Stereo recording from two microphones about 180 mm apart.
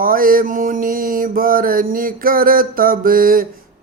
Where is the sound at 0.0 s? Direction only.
50° right (ahead or behind).